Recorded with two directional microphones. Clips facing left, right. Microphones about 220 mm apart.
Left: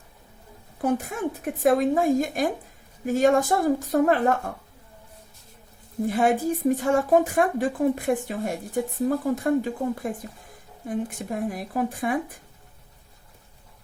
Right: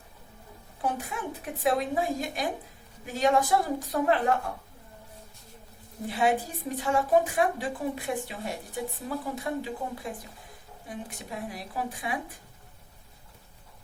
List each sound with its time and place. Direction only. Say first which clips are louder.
0.8 s a woman's voice: left 7 dB; 45° left (ahead or behind)
6.1 s a woman's voice: left 5 dB; 50° left (ahead or behind)